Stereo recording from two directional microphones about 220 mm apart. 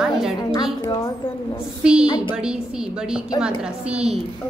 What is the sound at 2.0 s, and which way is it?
Speech, 20° left (ahead or behind).